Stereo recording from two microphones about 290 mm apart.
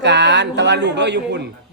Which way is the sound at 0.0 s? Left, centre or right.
Right.